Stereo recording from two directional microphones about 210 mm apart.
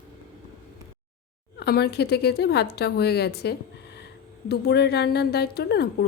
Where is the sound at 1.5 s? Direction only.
50° left (ahead or behind).